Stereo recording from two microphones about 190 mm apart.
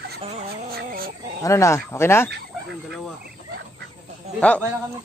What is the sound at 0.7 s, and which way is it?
Chicken, 50° right (ahead or behind).